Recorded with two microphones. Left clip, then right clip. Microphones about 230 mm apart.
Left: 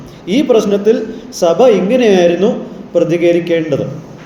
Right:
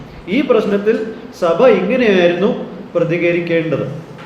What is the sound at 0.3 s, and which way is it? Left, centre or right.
A man's voice, left.